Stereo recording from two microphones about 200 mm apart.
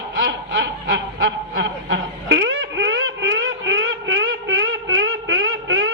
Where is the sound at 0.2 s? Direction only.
60° right (ahead or behind).